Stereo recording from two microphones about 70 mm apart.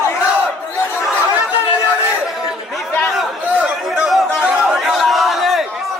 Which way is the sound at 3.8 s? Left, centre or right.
Centre.